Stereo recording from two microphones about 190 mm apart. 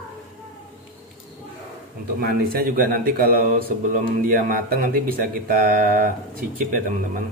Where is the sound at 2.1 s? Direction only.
50° right (ahead or behind).